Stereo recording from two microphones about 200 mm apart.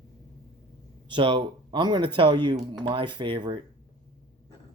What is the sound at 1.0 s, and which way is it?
Speech, 25° right (ahead or behind).